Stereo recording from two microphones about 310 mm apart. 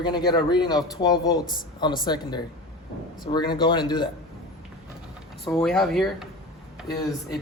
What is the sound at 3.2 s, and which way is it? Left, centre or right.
Speech, centre.